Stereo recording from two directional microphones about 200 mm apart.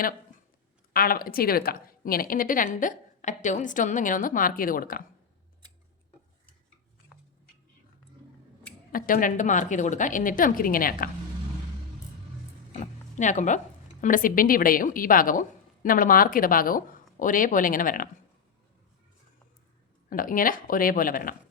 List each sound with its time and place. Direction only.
0.9 s speech: 45° left (ahead or behind)
8.9 s speech: 45° left (ahead or behind)
12.8 s speech: 35° left (ahead or behind)
20.1 s speech: 45° left (ahead or behind)